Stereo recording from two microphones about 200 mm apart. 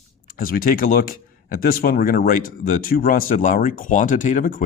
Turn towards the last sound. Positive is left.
turn(degrees=40)  # may be behind; listen again after turning